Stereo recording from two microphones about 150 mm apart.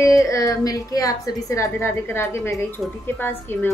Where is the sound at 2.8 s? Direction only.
Centre (ahead or behind).